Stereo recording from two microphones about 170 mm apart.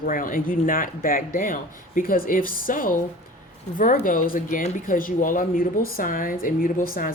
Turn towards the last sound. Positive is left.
turn(degrees=55)  # may be behind; listen again after turning